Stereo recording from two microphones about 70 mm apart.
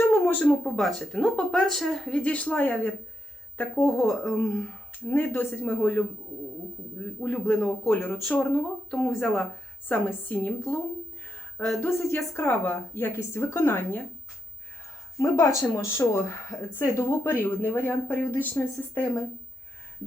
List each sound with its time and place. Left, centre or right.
0.0 s a sound: left
0.6 s speech: centre
2.3 s speech: left
3.8 s speech: centre
4.1 s a woman's voice: left
4.4 s speech: centre
8.9 s speech: centre
9.9 s speech: left
11.8 s a woman's voice: left
15.2 s speech: left